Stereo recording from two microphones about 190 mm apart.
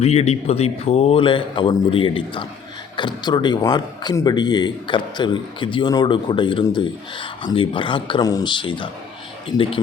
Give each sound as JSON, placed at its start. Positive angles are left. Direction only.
{"t": 0.0, "sound": "speech", "side_deg": 35}